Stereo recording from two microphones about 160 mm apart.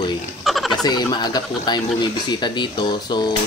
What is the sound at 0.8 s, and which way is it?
Speech, 25° left (ahead or behind).